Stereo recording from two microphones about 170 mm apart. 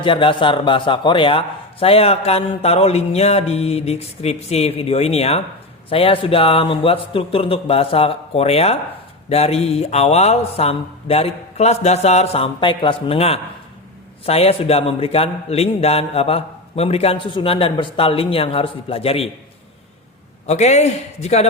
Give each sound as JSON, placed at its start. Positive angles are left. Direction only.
{"t": 0.0, "sound": "a man's voice", "side_deg": 30}
{"t": 20.5, "sound": "a man's voice", "side_deg": 40}